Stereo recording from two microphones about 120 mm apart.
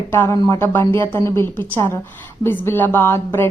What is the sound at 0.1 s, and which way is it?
A woman's voice, 20° left (ahead or behind).